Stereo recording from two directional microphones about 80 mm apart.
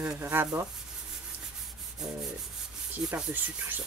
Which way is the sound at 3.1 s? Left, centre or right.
Right.